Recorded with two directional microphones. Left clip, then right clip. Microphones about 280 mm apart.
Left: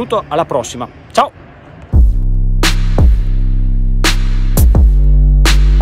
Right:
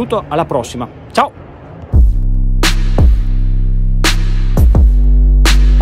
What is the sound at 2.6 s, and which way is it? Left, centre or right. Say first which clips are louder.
Music: even; centre.